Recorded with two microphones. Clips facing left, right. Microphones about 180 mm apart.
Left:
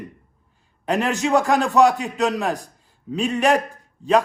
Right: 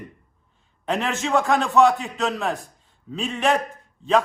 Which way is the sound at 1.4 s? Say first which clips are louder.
Right 1 dB; centre (ahead or behind).